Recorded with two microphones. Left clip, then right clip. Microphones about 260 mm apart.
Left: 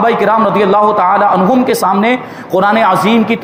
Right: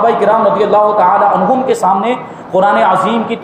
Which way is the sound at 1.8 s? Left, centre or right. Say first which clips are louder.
Even; left.